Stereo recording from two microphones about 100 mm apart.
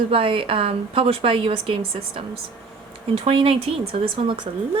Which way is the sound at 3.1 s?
70° right (ahead or behind).